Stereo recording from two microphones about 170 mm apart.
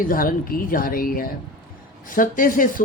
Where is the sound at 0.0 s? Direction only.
55° left (ahead or behind).